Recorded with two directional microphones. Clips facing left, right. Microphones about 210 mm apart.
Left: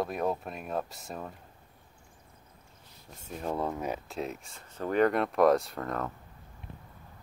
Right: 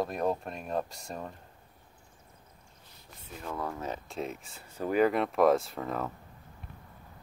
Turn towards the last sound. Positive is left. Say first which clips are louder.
# even
turn(degrees=-5)  # may be behind; listen again after turning